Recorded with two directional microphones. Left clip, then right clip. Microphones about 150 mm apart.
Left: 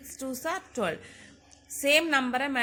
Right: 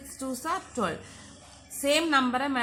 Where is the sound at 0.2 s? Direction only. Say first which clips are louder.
Right 1 dB; 35° left (ahead or behind).